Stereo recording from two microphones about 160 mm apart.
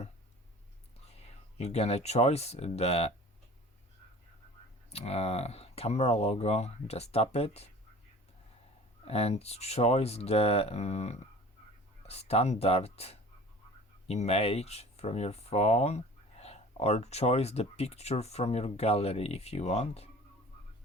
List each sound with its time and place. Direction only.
1.5 s speech: 40° left (ahead or behind)
4.9 s speech: 40° left (ahead or behind)
9.0 s speech: 40° left (ahead or behind)